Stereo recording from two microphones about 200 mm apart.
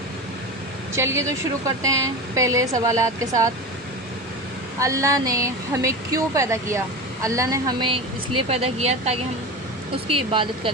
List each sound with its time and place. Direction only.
0.9 s speech: 15° right (ahead or behind)
4.8 s speech: 15° right (ahead or behind); by 9.1 s 30° right (ahead or behind)
10.2 s speech: 25° right (ahead or behind)